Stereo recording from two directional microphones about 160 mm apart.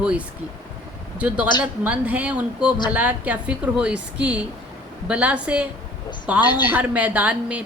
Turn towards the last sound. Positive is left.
turn(degrees=-10)  # may be behind; listen again after turning